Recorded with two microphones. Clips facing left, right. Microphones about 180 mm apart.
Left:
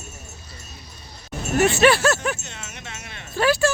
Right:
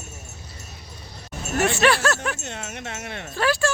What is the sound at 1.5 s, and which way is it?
Speech, centre (ahead or behind).